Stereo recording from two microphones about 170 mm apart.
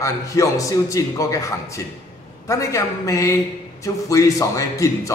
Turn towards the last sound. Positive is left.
turn(degrees=20)  # may be behind; listen again after turning